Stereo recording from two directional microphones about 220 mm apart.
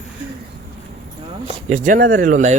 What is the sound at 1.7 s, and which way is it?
Speech, 35° right (ahead or behind).